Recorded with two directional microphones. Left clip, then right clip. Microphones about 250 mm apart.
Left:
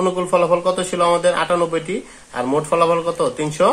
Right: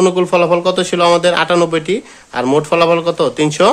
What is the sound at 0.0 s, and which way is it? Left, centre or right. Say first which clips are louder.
Speech: right 5 dB; right.